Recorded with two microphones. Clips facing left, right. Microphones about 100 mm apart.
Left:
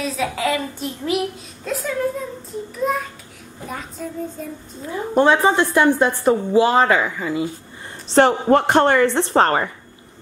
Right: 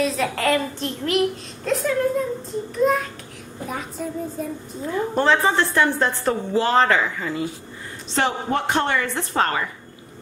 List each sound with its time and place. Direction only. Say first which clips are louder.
0.0 s a woman's voice: right 1 dB; centre (ahead or behind)
5.1 s a woman's voice: left 5 dB; 15° left (ahead or behind)
8.1 s speech: left 8 dB; 50° left (ahead or behind)
9.0 s a woman's voice: left 7 dB; 30° left (ahead or behind)